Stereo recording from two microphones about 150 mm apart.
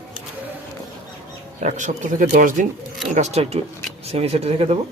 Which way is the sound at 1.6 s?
55° right (ahead or behind).